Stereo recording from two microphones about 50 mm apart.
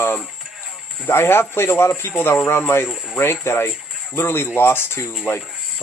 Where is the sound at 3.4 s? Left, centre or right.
Left.